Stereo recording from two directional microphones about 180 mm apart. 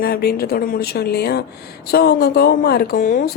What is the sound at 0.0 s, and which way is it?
A woman's voice, 60° left (ahead or behind).